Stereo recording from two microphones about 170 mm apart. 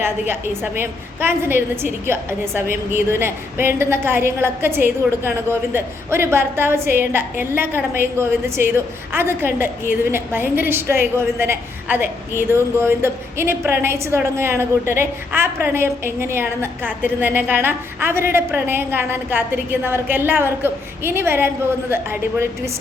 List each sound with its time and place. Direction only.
0.0 s a woman's voice: 15° right (ahead or behind)